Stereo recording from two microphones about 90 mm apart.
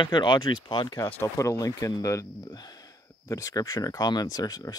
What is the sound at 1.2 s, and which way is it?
Speech, 35° left (ahead or behind).